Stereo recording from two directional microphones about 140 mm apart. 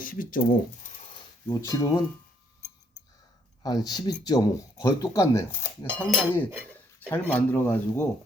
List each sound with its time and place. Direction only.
0.0 s speech: 80° left
1.5 s speech: 20° left (ahead or behind)
3.6 s speech: 30° left (ahead or behind)